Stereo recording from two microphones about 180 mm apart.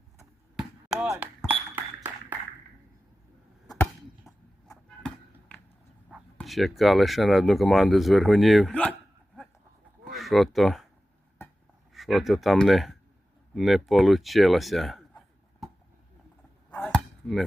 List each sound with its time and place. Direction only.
0.5 s basketball bounce: 5° right (ahead or behind)
4.7 s chop: 20° left (ahead or behind)
6.3 s speech: centre (ahead or behind)
11.9 s speech: centre (ahead or behind)
16.7 s chopping: 5° left (ahead or behind)